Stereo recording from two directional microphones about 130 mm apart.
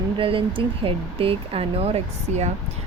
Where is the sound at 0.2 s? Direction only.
40° right (ahead or behind).